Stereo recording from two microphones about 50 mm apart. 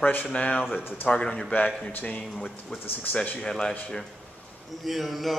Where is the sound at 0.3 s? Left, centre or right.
Left.